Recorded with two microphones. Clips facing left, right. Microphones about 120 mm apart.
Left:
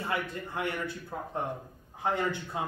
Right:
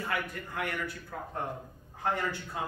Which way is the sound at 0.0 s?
25° left (ahead or behind).